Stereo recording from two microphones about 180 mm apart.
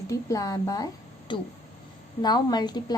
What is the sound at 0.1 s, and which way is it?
A woman's voice, 20° left (ahead or behind).